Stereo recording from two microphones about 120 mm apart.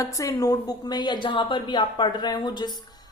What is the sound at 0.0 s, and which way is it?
A woman's voice, 25° left (ahead or behind).